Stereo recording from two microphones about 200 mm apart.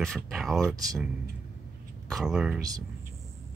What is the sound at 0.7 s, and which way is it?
Speech, 15° right (ahead or behind).